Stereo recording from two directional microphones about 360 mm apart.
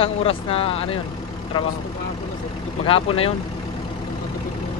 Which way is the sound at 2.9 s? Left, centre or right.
Centre.